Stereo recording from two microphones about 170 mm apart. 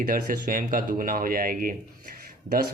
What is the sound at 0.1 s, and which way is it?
A man's voice, 55° right (ahead or behind).